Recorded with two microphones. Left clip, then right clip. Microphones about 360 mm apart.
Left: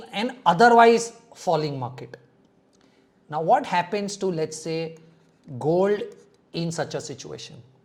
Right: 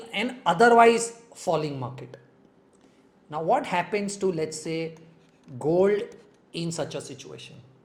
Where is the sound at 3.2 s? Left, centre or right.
Left.